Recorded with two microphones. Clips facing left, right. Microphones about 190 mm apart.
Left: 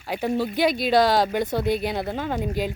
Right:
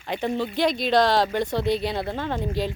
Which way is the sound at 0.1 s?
10° left (ahead or behind).